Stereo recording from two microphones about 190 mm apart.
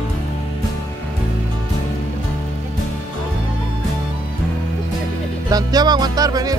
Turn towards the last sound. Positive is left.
turn(degrees=-20)  # may be behind; listen again after turning